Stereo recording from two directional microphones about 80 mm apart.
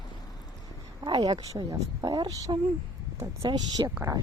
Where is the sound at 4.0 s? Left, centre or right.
Right.